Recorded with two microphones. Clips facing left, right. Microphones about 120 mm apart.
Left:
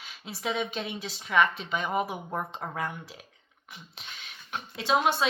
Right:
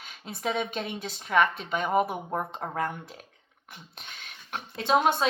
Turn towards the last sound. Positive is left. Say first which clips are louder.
# right 2 dB
turn(degrees=-40)  # may be behind; listen again after turning